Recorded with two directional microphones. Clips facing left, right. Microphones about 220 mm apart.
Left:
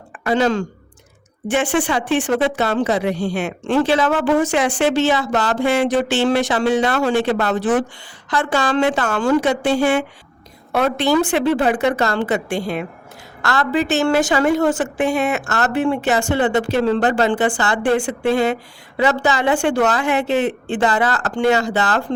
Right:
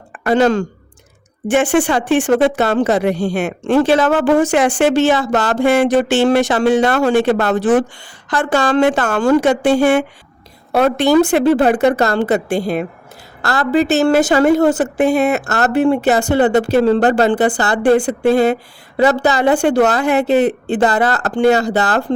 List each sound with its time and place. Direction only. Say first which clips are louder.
0.3 s a woman's voice: right 4 dB; 50° right (ahead or behind)